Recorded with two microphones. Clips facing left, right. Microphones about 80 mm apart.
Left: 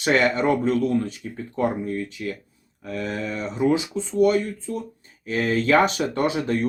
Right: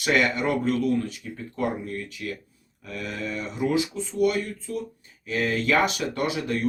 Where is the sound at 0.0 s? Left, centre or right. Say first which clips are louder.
Left 3 dB; left.